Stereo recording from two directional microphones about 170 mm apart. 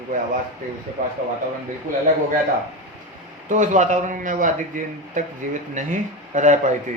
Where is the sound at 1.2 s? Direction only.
60° right (ahead or behind).